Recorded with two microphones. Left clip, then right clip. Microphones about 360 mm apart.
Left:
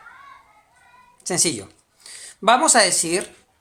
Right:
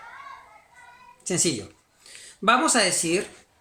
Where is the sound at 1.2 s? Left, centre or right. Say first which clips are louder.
Left 3 dB; centre.